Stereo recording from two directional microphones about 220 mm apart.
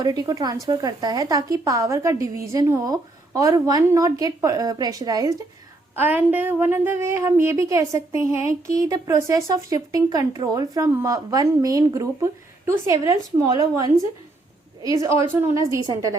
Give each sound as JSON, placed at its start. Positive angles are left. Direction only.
{"t": 0.0, "sound": "speech", "side_deg": -20}
{"t": 15.0, "sound": "speech", "side_deg": -10}